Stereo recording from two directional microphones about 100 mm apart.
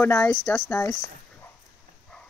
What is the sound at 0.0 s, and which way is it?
A child's voice, 20° left (ahead or behind).